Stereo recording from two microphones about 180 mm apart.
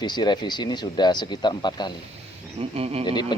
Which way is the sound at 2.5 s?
35° right (ahead or behind).